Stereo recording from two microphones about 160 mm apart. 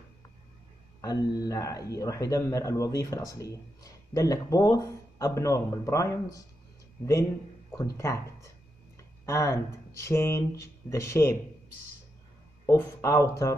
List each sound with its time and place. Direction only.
1.0 s speech: 20° left (ahead or behind)
7.7 s speech: 20° left (ahead or behind)
9.2 s speech: 15° left (ahead or behind)
12.6 s speech: 15° left (ahead or behind)